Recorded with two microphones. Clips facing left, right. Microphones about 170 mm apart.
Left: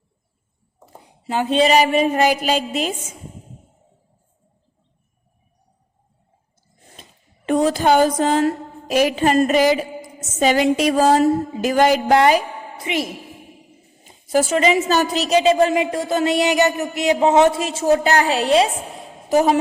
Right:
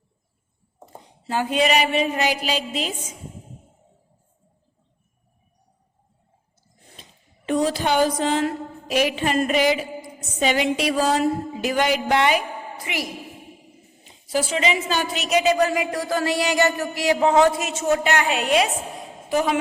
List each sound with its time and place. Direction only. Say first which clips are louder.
1.2 s a woman's voice: left 4 dB; 20° left (ahead or behind); by 2.9 s 50° left (ahead or behind)
7.4 s a woman's voice: left 5 dB; 50° left (ahead or behind)
12.8 s a woman's voice: left 7 dB; 25° left (ahead or behind)
14.0 s a woman's voice: left 6 dB; 45° left (ahead or behind); by 18.7 s 30° left (ahead or behind)
19.3 s a woman's voice: left 6 dB; 40° left (ahead or behind)